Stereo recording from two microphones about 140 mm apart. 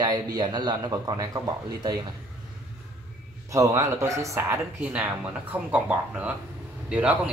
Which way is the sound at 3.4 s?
20° right (ahead or behind).